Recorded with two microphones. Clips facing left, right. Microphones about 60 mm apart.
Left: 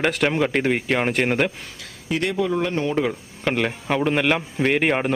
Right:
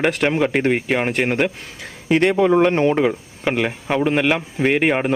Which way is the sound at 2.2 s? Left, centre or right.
Right.